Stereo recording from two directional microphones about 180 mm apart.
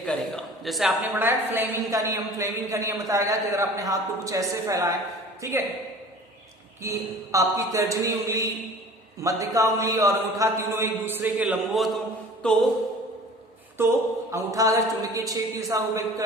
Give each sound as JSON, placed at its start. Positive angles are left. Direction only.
{"t": 0.0, "sound": "a man's voice", "side_deg": 5}
{"t": 1.2, "sound": "a man's voice", "side_deg": -10}
{"t": 6.8, "sound": "a man's voice", "side_deg": -15}
{"t": 12.4, "sound": "mantra", "side_deg": 5}
{"t": 13.8, "sound": "a man's voice", "side_deg": -15}